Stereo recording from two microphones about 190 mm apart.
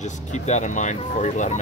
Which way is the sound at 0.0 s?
40° left (ahead or behind).